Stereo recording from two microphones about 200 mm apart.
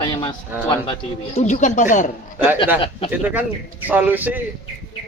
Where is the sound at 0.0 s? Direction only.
20° left (ahead or behind).